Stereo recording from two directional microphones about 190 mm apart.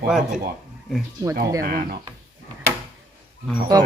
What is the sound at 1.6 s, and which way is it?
Speech, 50° right (ahead or behind).